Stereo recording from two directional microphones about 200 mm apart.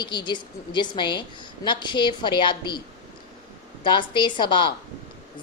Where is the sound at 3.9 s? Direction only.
25° left (ahead or behind).